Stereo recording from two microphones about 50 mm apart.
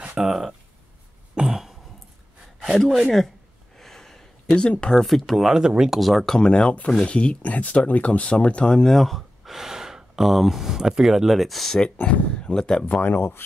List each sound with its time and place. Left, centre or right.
0.2 s speech: centre
1.3 s cough: centre
2.6 s speech: centre
3.7 s a sound: centre
5.0 s speech: centre
5.5 s speech: centre
5.9 s speech: centre
6.2 s speech: centre
12.0 s speech: left
12.8 s speech: left